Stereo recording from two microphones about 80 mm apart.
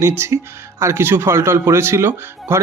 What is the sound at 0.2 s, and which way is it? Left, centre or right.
Speech, right.